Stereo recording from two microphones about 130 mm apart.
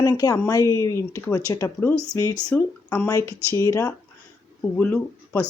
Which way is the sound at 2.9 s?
25° left (ahead or behind).